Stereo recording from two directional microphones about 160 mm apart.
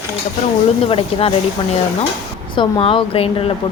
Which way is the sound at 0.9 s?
35° left (ahead or behind).